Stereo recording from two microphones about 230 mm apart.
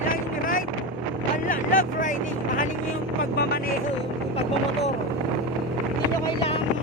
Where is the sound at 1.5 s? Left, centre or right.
Left.